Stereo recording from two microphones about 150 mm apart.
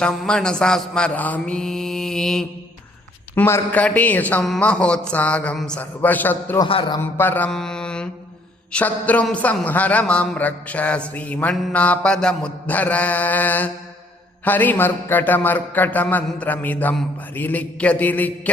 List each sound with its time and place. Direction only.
0.0 s mantra: 5° left (ahead or behind)
3.3 s a man's voice: 15° left (ahead or behind)
6.7 s speech: 35° left (ahead or behind)
7.0 s mantra: 15° left (ahead or behind)
8.7 s a man's voice: 10° left (ahead or behind)